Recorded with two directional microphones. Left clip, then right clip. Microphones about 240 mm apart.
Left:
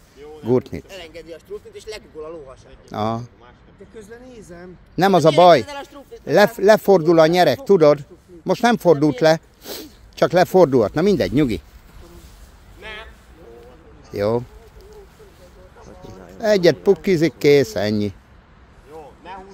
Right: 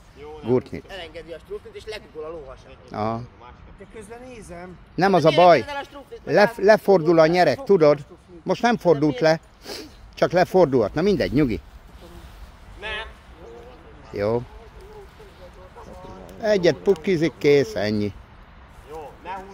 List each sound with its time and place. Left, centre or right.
0.5 s speech: centre
0.8 s speech: left
2.9 s speech: centre
3.9 s speech: centre
4.9 s speech: centre
5.7 s speech: left
6.2 s speech: centre
12.8 s a sound: centre
14.1 s speech: centre
16.1 s a sound: left
17.0 s speech: left
18.9 s vehicle: centre